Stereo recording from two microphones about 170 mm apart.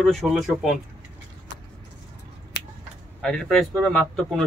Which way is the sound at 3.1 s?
5° left (ahead or behind).